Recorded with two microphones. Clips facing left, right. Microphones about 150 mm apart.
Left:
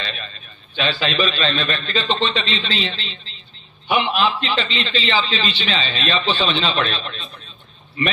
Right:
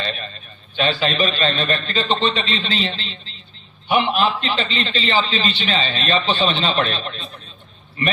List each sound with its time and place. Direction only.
0.0 s a man's voice: 40° right (ahead or behind)